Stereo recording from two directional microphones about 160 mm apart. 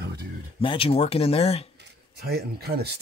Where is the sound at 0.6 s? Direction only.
35° left (ahead or behind).